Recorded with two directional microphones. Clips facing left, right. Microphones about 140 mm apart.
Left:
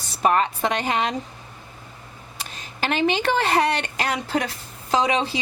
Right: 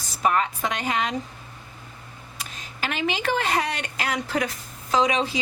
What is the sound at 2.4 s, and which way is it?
Speech, 30° left (ahead or behind).